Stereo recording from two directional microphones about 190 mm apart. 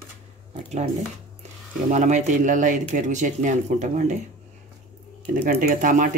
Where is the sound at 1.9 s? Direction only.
40° right (ahead or behind).